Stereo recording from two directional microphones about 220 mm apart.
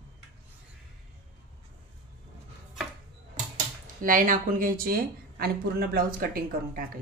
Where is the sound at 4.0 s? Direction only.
35° right (ahead or behind).